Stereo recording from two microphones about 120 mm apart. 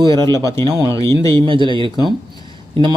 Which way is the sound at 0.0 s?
40° right (ahead or behind).